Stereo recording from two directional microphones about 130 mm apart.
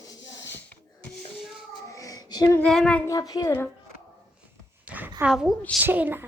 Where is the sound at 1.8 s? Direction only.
25° left (ahead or behind).